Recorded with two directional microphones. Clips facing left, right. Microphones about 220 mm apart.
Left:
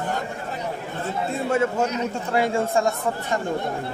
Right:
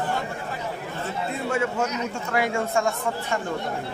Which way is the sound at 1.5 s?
40° left (ahead or behind).